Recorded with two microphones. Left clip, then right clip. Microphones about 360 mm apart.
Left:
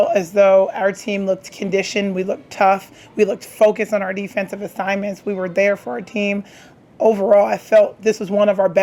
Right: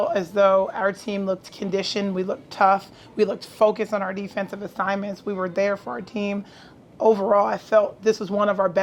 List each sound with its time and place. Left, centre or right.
0.0 s speech: left